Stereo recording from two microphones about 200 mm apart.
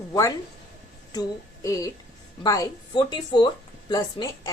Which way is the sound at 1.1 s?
20° left (ahead or behind).